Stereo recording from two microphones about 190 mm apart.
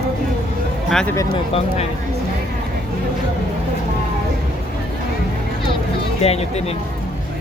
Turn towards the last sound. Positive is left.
turn(degrees=35)  # may be behind; listen again after turning